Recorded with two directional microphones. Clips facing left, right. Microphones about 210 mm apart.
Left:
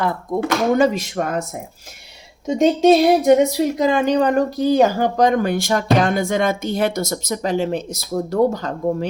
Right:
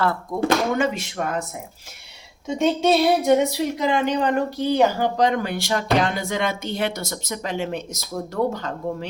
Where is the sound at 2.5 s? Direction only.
40° left (ahead or behind).